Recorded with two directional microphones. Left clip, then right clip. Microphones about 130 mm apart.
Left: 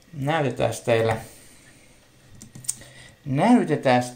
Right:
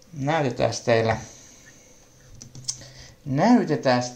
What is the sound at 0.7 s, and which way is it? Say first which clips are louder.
Speech: even; 20° right (ahead or behind).